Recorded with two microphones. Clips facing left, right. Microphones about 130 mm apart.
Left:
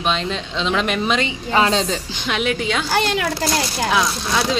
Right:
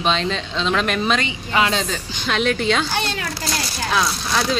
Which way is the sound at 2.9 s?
90° left.